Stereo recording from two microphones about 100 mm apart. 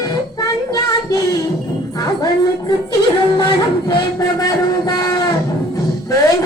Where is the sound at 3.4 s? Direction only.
45° left (ahead or behind).